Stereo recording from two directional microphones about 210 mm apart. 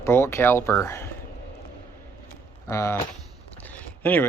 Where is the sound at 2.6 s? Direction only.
15° left (ahead or behind).